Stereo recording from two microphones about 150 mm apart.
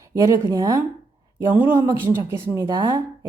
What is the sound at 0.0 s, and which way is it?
A woman's voice, 20° right (ahead or behind).